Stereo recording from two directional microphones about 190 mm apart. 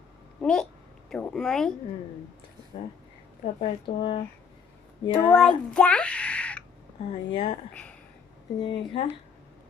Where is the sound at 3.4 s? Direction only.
35° left (ahead or behind).